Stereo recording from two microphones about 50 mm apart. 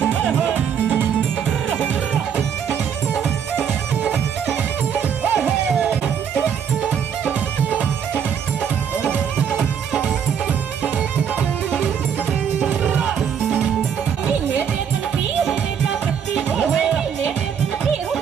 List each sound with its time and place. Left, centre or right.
5.4 s music: centre
9.1 s music: right
16.3 s music: centre